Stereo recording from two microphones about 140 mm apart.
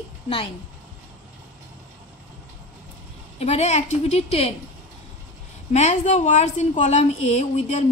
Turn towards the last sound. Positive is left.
turn(degrees=55)  # may be behind; listen again after turning